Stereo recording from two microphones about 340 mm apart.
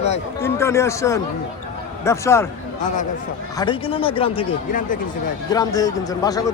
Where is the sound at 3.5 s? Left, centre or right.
Centre.